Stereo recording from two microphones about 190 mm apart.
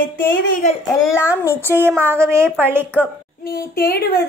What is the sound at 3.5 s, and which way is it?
Speech, 55° left (ahead or behind).